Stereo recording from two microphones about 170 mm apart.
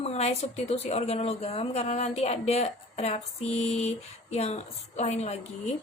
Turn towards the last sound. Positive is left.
turn(degrees=40)  # may be behind; listen again after turning